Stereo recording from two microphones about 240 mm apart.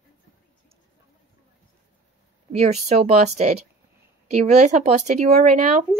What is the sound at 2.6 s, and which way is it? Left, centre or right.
Speech, right.